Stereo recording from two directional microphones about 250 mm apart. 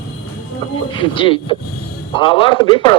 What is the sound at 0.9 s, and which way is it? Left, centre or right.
A man's voice, centre.